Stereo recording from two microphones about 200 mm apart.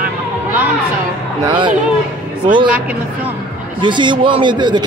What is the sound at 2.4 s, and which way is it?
Speech, 45° right (ahead or behind).